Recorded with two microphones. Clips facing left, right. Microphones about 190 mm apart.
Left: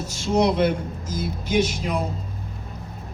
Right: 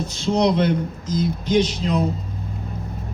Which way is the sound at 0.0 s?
10° left (ahead or behind).